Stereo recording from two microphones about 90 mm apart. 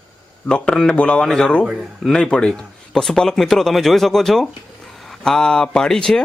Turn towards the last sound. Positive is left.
turn(degrees=5)  # may be behind; listen again after turning